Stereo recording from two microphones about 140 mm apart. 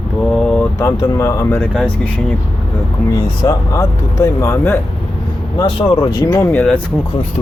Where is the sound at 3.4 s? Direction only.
25° left (ahead or behind).